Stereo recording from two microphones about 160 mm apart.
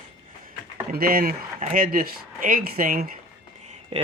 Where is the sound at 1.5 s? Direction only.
55° right (ahead or behind).